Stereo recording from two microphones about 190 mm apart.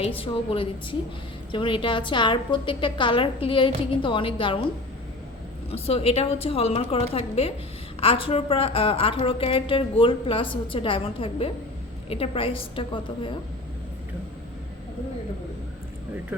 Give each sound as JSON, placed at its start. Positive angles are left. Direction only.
{"t": 0.0, "sound": "a woman's voice", "side_deg": 30}
{"t": 5.7, "sound": "a woman's voice", "side_deg": 30}